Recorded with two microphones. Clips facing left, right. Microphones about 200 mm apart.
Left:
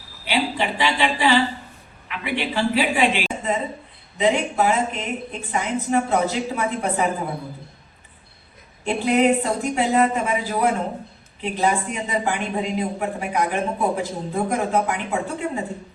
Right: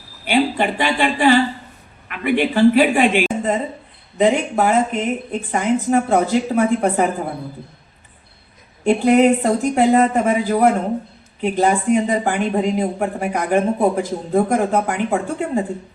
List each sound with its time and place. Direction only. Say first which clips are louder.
0.3 s speech: right 6 dB; 50° right (ahead or behind)
8.8 s speech: right 6 dB; 50° right (ahead or behind)